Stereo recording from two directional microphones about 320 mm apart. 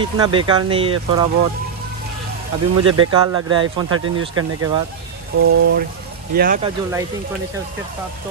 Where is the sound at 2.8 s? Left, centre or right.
Right.